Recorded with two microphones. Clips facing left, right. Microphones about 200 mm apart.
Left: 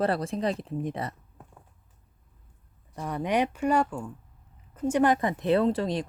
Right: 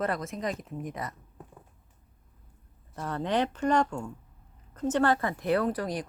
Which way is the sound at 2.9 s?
15° left (ahead or behind).